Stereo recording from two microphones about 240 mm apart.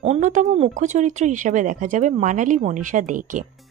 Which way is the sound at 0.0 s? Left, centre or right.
Right.